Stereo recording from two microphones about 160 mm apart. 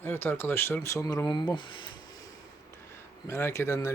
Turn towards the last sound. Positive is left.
turn(degrees=15)  # may be behind; listen again after turning